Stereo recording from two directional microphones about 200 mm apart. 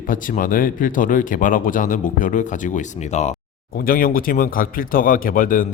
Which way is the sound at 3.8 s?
45° left (ahead or behind).